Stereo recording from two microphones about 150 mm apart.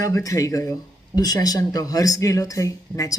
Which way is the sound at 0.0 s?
20° left (ahead or behind).